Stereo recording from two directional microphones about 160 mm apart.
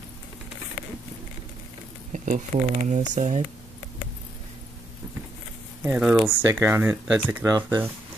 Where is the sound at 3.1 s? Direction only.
50° right (ahead or behind).